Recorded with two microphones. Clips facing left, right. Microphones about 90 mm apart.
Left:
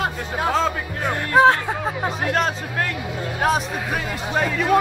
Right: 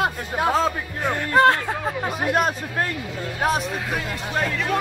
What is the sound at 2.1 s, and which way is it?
Speech, 10° right (ahead or behind).